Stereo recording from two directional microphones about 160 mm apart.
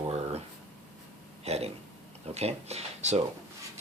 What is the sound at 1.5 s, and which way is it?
Speech, 40° right (ahead or behind).